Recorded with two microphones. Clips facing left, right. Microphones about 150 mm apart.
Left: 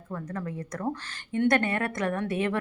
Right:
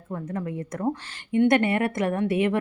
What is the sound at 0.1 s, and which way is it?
Speech, 25° right (ahead or behind).